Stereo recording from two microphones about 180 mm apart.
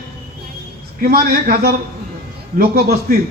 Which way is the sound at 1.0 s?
55° right (ahead or behind).